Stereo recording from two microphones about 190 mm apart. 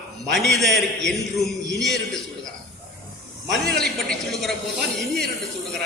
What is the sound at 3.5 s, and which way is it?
A man's voice, 5° left (ahead or behind).